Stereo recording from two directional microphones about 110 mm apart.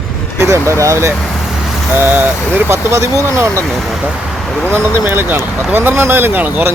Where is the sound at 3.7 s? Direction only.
Centre (ahead or behind).